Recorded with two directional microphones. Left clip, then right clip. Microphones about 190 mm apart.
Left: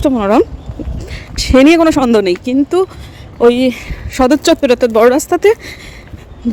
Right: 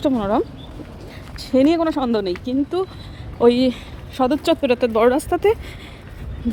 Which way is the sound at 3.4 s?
15° left (ahead or behind).